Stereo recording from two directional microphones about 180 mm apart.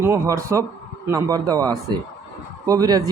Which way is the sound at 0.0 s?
15° right (ahead or behind).